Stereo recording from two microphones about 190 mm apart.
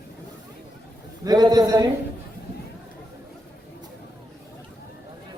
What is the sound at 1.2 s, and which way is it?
Speech, 20° right (ahead or behind).